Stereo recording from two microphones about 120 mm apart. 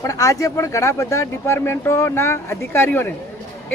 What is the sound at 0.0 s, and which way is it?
Speech, 25° left (ahead or behind).